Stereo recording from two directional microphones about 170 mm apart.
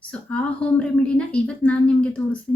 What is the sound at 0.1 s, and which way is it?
A woman's voice, 5° left (ahead or behind).